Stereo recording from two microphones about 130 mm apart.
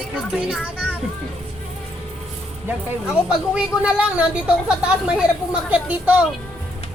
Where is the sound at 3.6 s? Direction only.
10° right (ahead or behind).